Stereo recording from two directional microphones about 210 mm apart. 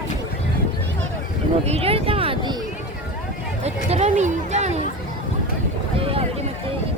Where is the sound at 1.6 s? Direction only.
30° right (ahead or behind).